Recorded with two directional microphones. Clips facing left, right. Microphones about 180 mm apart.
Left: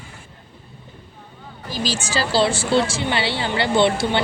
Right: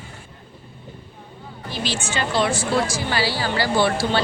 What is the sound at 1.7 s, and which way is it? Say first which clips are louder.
Speech: left 2 dB; 40° left (ahead or behind).